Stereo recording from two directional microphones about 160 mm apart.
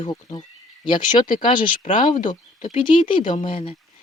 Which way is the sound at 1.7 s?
55° left (ahead or behind).